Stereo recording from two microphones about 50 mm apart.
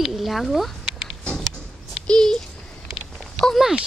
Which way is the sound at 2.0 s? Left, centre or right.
Centre.